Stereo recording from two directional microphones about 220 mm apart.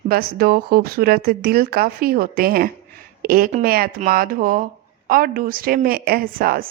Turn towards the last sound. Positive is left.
turn(degrees=-40)  # may be behind; listen again after turning